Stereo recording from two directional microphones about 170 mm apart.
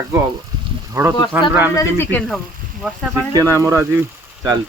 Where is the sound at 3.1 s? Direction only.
15° right (ahead or behind).